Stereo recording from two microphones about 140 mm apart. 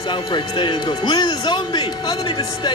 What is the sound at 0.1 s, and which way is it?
Speech, 35° left (ahead or behind).